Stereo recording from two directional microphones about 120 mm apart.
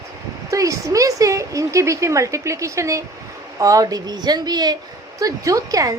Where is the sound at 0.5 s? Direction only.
25° right (ahead or behind).